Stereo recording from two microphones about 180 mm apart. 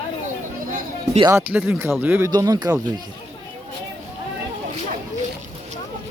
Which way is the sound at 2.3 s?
25° right (ahead or behind).